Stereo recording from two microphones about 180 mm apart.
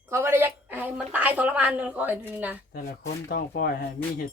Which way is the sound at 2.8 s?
60° left (ahead or behind).